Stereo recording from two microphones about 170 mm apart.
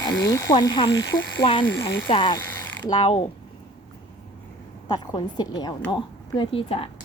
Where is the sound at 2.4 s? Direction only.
15° left (ahead or behind).